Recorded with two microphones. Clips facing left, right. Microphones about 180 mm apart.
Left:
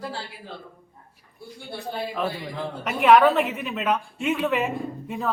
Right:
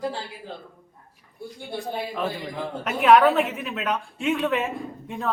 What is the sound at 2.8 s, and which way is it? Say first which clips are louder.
A woman's voice: even; centre (ahead or behind).